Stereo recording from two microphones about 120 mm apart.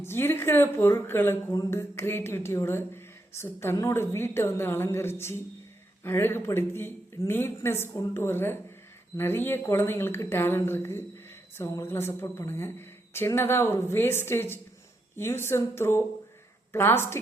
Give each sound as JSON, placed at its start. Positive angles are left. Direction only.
{"t": 0.0, "sound": "speech", "side_deg": 20}